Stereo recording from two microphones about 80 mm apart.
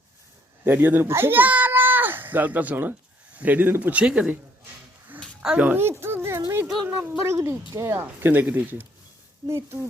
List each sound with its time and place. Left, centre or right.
0.6 s speech: right
5.4 s speech: centre
5.6 s a sound: right
7.9 s speech: right
9.5 s speech: right